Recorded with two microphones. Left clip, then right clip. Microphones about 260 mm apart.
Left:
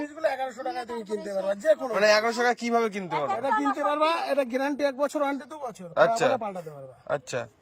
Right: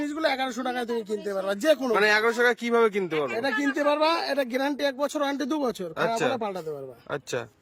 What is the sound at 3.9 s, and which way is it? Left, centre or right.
Speech, right.